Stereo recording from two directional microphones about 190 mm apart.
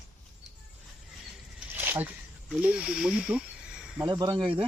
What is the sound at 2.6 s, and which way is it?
Speech, 5° right (ahead or behind).